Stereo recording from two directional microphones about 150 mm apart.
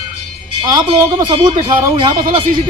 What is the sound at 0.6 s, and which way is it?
Speech, 30° right (ahead or behind).